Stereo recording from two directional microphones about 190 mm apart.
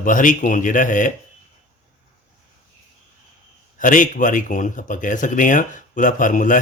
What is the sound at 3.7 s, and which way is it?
Speech, 45° left (ahead or behind).